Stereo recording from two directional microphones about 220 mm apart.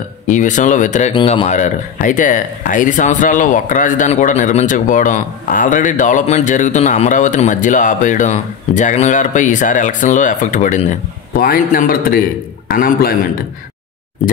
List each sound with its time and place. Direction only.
0.3 s speech: 35° left (ahead or behind)